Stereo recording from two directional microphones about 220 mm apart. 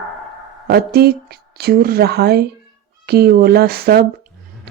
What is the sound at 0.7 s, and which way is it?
Speech, 45° right (ahead or behind).